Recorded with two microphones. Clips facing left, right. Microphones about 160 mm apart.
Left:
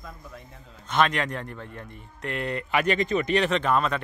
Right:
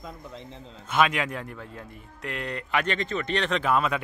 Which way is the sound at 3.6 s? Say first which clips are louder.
Even; 5° right (ahead or behind).